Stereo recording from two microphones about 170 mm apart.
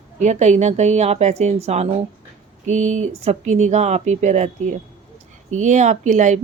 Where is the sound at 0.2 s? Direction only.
45° right (ahead or behind).